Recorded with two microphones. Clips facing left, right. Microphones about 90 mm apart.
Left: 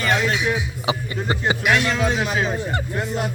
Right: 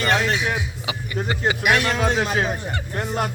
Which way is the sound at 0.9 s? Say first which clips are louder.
Left 4 dB; 30° left (ahead or behind).